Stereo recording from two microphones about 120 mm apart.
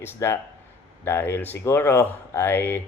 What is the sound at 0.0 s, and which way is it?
Speech, 20° left (ahead or behind).